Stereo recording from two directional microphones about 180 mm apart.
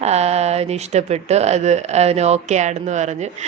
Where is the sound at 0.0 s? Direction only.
35° right (ahead or behind).